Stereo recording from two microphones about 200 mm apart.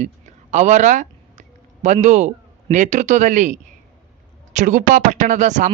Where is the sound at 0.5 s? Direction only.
35° right (ahead or behind).